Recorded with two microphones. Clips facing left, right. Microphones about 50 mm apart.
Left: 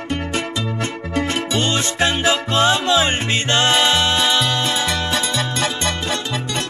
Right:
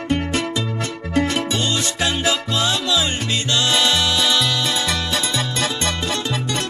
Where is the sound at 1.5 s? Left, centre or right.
Left.